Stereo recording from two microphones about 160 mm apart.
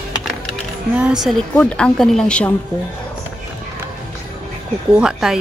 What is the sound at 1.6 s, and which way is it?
Speech, 5° left (ahead or behind).